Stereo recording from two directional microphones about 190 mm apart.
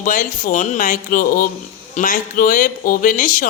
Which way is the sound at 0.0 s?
45° left (ahead or behind).